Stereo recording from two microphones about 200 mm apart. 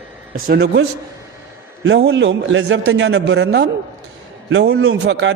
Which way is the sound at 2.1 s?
65° right (ahead or behind).